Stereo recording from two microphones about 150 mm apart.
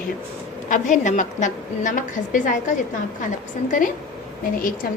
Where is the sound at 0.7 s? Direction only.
55° left (ahead or behind).